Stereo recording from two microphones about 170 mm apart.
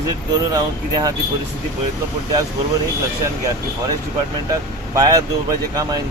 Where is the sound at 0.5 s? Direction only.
20° right (ahead or behind).